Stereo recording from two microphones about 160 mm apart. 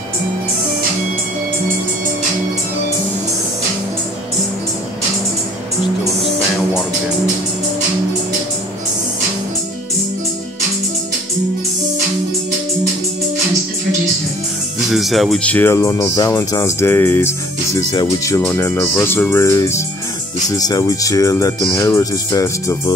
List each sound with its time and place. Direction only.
14.9 s speech: centre (ahead or behind); by 22.9 s 20° left (ahead or behind)